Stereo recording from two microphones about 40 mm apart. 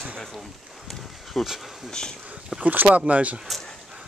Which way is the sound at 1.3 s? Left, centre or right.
Centre.